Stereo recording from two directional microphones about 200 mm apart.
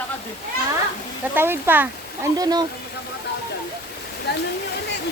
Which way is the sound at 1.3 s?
10° right (ahead or behind).